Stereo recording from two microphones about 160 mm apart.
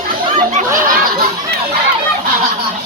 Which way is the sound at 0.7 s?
60° right (ahead or behind).